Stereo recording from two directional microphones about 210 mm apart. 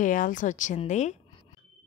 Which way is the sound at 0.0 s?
40° left (ahead or behind).